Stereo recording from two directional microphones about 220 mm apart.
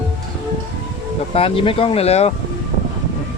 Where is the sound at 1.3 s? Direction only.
25° left (ahead or behind).